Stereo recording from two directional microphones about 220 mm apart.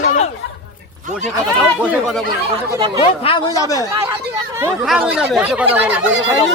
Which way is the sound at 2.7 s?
20° right (ahead or behind).